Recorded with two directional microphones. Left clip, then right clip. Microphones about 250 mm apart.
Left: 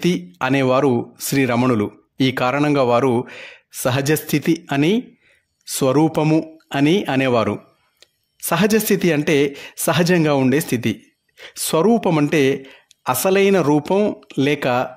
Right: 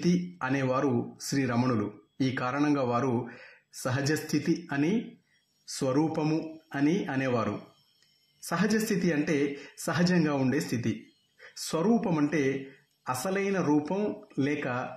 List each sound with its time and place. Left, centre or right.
0.0 s speech: left